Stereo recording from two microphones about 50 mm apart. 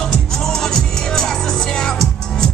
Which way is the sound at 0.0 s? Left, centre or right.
Centre.